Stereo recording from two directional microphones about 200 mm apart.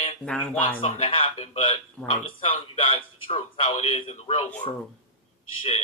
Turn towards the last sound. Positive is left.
turn(degrees=25)  # may be behind; listen again after turning